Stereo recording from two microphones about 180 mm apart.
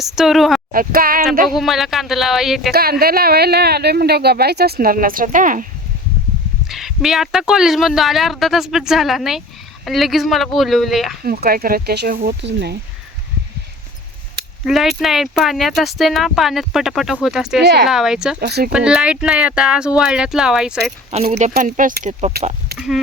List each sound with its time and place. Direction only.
0.0 s speech: centre (ahead or behind)
0.7 s speech: 50° right (ahead or behind)
1.5 s speech: centre (ahead or behind)
2.7 s speech: 60° right (ahead or behind)
6.7 s speech: centre (ahead or behind)
11.2 s speech: 55° right (ahead or behind); by 12.7 s 75° right (ahead or behind)
14.6 s speech: centre (ahead or behind)
17.6 s speech: 65° right (ahead or behind)
17.8 s speech: centre (ahead or behind)
18.3 s speech: 60° right (ahead or behind)
18.7 s speech: 5° right (ahead or behind)
21.1 s speech: 40° right (ahead or behind)
21.6 s speech: 50° right (ahead or behind)